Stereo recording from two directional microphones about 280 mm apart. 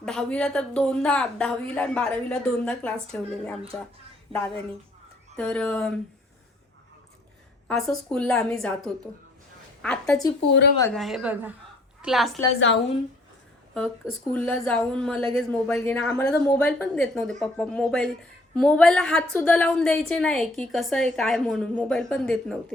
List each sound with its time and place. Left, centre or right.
0.0 s a woman's voice: centre
7.7 s a woman's voice: centre
12.5 s a woman's voice: left
13.7 s a woman's voice: centre